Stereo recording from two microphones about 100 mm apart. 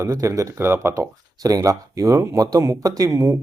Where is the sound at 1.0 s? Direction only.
40° right (ahead or behind).